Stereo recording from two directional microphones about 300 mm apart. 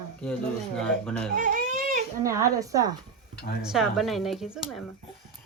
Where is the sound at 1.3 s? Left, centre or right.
Right.